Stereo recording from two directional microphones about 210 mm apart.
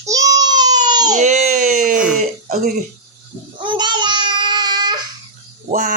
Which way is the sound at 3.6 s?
20° right (ahead or behind).